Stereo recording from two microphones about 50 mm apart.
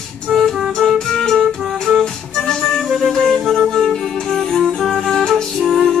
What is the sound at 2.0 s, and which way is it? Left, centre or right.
Organ, centre.